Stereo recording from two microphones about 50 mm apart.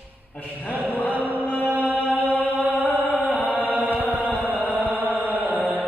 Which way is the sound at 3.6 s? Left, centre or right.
Right.